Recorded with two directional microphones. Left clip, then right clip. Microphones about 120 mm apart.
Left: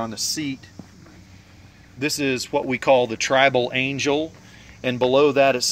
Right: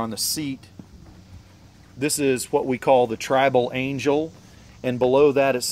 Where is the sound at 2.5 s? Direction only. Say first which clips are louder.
Left 1 dB; 90° right.